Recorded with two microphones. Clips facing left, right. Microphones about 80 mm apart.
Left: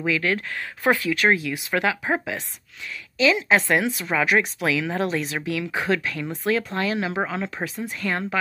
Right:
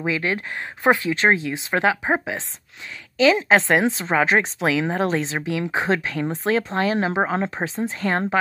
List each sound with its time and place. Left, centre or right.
0.0 s speech: right